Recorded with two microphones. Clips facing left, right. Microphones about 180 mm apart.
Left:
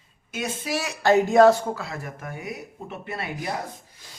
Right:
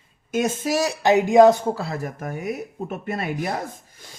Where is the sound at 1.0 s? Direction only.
15° right (ahead or behind).